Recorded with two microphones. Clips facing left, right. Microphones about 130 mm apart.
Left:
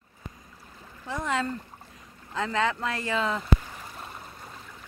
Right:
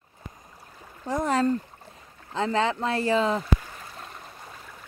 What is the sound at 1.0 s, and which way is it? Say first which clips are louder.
Speech: right 6 dB; 40° right (ahead or behind).